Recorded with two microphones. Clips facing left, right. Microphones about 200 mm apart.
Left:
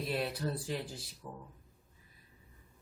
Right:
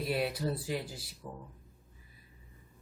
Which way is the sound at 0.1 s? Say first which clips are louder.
Right 3 dB; 5° right (ahead or behind).